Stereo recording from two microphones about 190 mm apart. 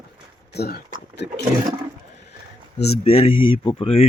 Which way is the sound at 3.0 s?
30° left (ahead or behind).